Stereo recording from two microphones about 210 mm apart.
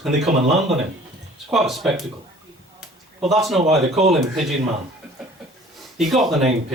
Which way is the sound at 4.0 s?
30° right (ahead or behind).